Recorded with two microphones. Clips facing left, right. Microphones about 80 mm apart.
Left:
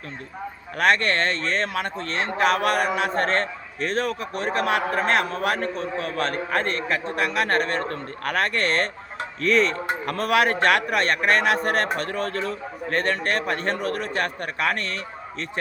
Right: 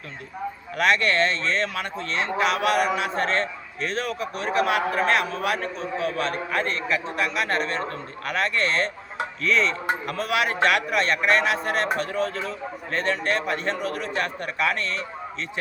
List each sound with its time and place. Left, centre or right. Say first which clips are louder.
0.8 s speech: even; left